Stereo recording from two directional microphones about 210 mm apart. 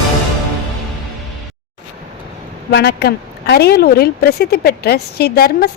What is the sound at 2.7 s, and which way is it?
A woman's voice, 55° left (ahead or behind).